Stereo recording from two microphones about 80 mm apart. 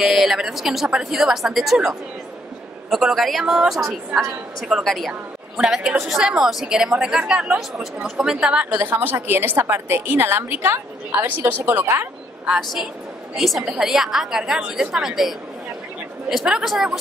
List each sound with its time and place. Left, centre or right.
0.0 s a woman's voice: centre
8.7 s a woman's voice: right
13.3 s a woman's voice: centre